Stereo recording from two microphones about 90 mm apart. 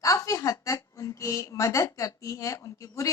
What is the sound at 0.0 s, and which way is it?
A woman's voice, 35° left (ahead or behind).